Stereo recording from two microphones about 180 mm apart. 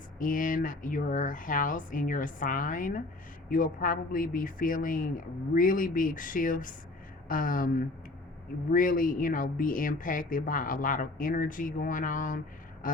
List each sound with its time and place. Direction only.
0.2 s speech: 50° left (ahead or behind)